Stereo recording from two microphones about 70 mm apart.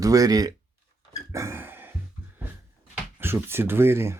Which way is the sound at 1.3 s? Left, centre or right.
Right.